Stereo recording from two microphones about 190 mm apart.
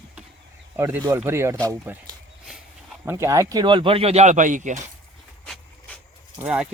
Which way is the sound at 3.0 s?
15° right (ahead or behind).